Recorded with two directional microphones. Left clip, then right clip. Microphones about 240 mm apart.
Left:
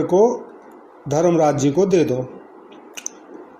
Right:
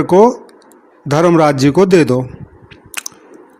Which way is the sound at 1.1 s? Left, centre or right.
Right.